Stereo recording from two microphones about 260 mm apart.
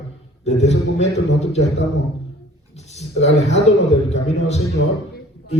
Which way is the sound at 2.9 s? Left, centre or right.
Left.